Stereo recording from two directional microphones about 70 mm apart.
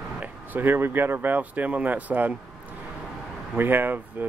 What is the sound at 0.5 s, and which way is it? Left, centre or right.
Speech, right.